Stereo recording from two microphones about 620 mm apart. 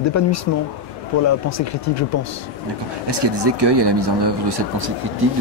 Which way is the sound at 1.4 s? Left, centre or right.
Left.